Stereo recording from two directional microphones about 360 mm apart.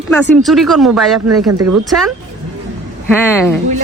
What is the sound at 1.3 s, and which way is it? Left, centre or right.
Speech, right.